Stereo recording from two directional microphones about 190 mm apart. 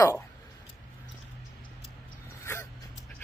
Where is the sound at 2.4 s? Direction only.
15° left (ahead or behind).